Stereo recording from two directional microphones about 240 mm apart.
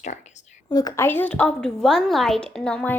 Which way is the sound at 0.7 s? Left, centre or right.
Centre.